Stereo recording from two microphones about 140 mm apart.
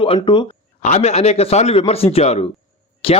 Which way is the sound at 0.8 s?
50° left (ahead or behind).